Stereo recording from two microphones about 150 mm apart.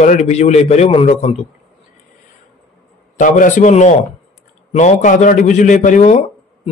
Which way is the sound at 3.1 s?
60° left (ahead or behind).